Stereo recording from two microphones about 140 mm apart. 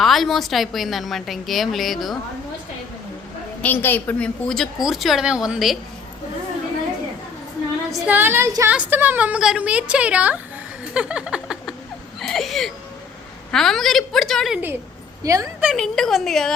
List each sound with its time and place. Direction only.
0.0 s a woman's voice: centre (ahead or behind)
3.6 s a woman's voice: 15° left (ahead or behind); by 5.7 s centre (ahead or behind)
7.9 s speech: 10° right (ahead or behind)
10.9 s a sound: 5° right (ahead or behind)
12.2 s whimper: centre (ahead or behind)
13.5 s a woman's voice: 5° left (ahead or behind)
15.2 s a woman's voice: 25° right (ahead or behind)
15.6 s a woman's voice: centre (ahead or behind)